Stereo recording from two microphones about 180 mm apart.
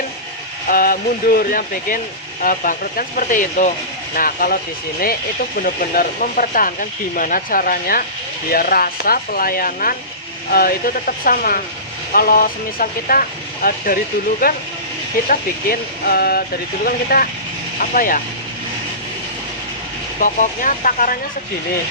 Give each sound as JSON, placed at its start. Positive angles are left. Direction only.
{"t": 0.7, "sound": "speech", "side_deg": 50}
{"t": 20.2, "sound": "speech", "side_deg": 45}